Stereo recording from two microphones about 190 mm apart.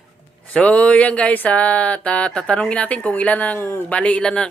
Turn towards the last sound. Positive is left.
turn(degrees=5)  # may be behind; listen again after turning